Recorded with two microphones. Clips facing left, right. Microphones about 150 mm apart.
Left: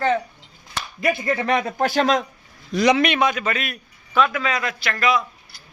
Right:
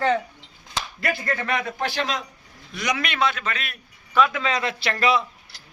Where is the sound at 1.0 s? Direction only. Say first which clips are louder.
Left 5 dB; 20° left (ahead or behind).